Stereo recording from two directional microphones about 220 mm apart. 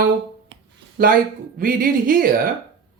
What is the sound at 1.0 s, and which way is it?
Speech, 40° right (ahead or behind).